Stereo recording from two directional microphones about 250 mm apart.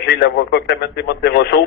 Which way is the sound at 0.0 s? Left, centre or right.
Left.